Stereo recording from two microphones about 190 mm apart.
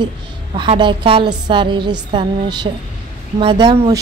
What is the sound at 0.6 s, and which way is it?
A woman's voice, 25° right (ahead or behind).